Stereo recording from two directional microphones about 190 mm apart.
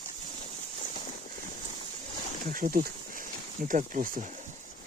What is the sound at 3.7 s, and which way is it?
Speech, 45° right (ahead or behind).